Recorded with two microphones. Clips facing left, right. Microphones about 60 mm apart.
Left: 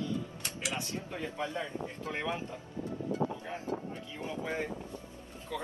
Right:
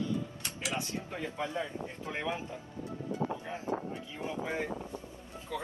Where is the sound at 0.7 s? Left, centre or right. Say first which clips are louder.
Right 3 dB; centre.